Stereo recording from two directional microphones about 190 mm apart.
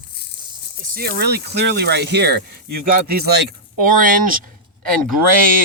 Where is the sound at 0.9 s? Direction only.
60° right (ahead or behind).